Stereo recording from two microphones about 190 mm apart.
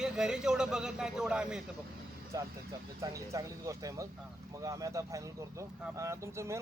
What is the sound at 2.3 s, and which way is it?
Speech, 15° right (ahead or behind).